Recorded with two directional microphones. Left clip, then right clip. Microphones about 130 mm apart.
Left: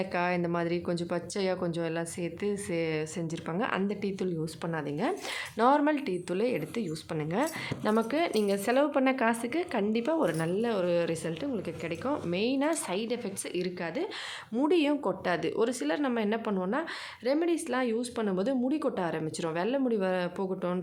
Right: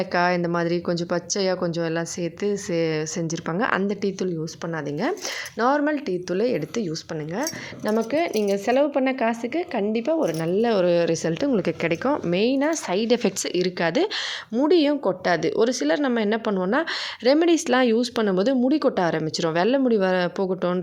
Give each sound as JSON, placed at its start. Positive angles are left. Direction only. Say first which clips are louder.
{"t": 0.0, "sound": "a woman's voice", "louder": "right 8 dB", "side_deg": -35}
{"t": 5.5, "sound": "a woman's voice", "louder": "right 3 dB", "side_deg": -15}
{"t": 6.3, "sound": "speech", "louder": "right 7 dB", "side_deg": -30}
{"t": 7.9, "sound": "speech", "louder": "right 6 dB", "side_deg": -20}
{"t": 10.5, "sound": "speech", "louder": "right 9 dB", "side_deg": -50}
{"t": 12.0, "sound": "a woman's voice", "louder": "right 7 dB", "side_deg": -45}
{"t": 13.7, "sound": "speech", "louder": "right 12 dB", "side_deg": -60}
{"t": 14.6, "sound": "a woman's voice", "louder": "right 7 dB", "side_deg": -30}
{"t": 17.2, "sound": "speech", "louder": "right 10 dB", "side_deg": -60}